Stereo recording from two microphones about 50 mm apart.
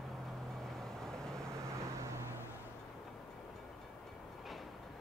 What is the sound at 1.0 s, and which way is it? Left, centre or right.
Vehicle, centre.